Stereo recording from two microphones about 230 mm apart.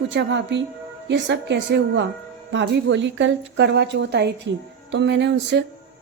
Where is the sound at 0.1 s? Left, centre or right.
Right.